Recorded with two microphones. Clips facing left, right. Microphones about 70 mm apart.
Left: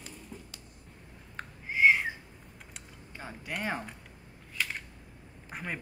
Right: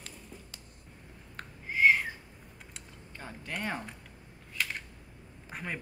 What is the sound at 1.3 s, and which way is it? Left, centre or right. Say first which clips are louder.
Owl: left 1 dB; centre.